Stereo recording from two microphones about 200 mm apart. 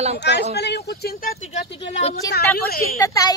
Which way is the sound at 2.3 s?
50° left (ahead or behind).